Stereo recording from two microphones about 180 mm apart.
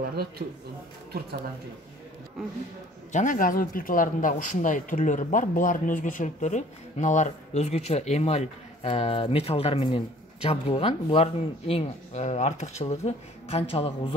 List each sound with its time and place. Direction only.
0.0 s speech: 60° right (ahead or behind)
3.1 s speech: 45° left (ahead or behind)